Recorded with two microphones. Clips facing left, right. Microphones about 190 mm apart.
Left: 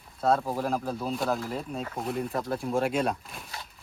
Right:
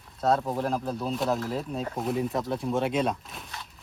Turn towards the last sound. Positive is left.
turn(degrees=0)  # may be behind; listen again after turning